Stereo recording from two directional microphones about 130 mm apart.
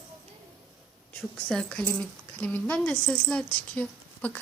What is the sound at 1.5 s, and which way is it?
A child's voice, 5° left (ahead or behind).